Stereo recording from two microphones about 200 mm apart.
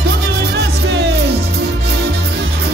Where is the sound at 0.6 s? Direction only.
55° right (ahead or behind).